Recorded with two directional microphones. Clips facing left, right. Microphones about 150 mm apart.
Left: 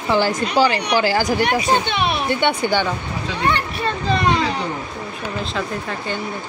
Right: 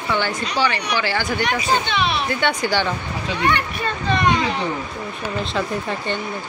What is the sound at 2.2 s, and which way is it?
Speech, 20° left (ahead or behind).